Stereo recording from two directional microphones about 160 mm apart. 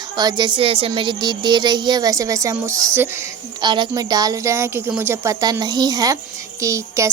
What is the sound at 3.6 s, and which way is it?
A woman's voice, 30° right (ahead or behind).